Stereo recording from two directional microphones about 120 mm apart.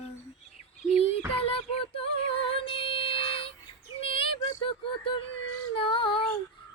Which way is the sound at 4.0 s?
50° left (ahead or behind).